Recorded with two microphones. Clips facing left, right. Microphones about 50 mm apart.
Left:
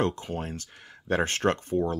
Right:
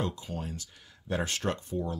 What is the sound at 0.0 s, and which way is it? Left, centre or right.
Speech, left.